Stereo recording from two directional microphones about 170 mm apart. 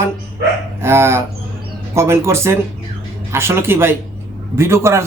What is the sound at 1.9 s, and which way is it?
Speech, 15° right (ahead or behind).